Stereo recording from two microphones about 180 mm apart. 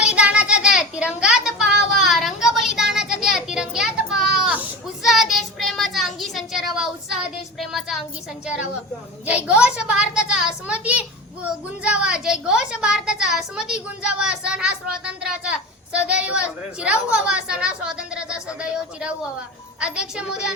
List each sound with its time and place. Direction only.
0.0 s child singing: 5° right (ahead or behind)
4.4 s a sound: 5° right (ahead or behind)
5.0 s child singing: centre (ahead or behind)
8.4 s a woman's voice: 5° right (ahead or behind)